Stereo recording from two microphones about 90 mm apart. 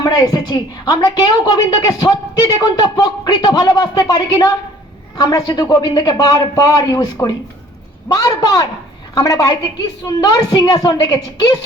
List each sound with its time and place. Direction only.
0.0 s a woman's voice: 45° left (ahead or behind)